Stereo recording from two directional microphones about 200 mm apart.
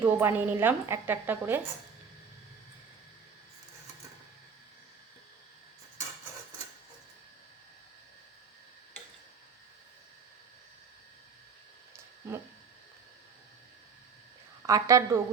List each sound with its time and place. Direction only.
0.0 s a woman's voice: 10° right (ahead or behind)
14.7 s a woman's voice: 15° right (ahead or behind)